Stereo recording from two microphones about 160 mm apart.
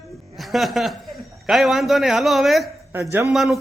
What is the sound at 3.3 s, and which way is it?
Speech, centre (ahead or behind).